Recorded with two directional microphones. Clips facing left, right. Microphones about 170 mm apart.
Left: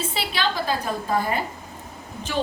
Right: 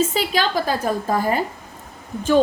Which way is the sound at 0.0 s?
45° right (ahead or behind).